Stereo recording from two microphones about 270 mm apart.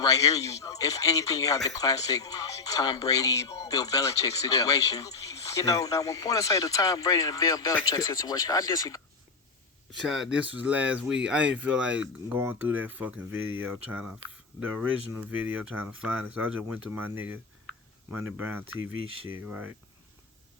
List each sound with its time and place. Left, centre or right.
0.0 s speech: centre
10.1 s speech: centre
13.3 s speech: right
13.6 s speech: centre